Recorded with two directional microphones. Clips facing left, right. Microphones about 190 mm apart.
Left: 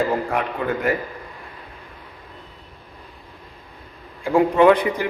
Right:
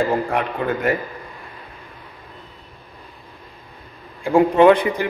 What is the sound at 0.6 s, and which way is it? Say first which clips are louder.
Speech: right 2 dB; 35° right (ahead or behind).